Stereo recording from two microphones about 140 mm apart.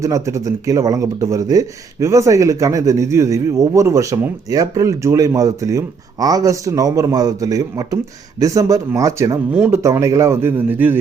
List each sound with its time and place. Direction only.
0.0 s speech: 20° right (ahead or behind)
9.5 s speech: 10° right (ahead or behind)